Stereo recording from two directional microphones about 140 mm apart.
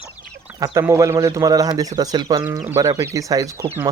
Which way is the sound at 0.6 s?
25° right (ahead or behind).